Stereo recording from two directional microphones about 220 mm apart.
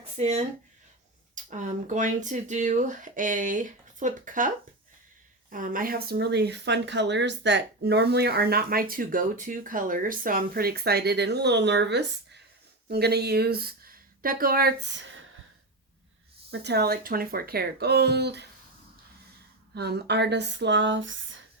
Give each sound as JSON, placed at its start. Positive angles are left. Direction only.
{"t": 0.2, "sound": "speech", "side_deg": -30}
{"t": 1.5, "sound": "speech", "side_deg": -35}
{"t": 16.5, "sound": "speech", "side_deg": -50}
{"t": 19.7, "sound": "speech", "side_deg": -50}